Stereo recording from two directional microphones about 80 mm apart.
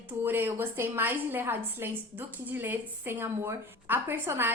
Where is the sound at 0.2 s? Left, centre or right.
Right.